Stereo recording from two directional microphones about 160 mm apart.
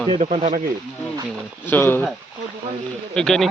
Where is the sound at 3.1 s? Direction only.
5° left (ahead or behind).